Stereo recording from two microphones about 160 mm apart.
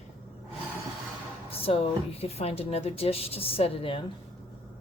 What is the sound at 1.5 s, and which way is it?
Speech, 35° left (ahead or behind).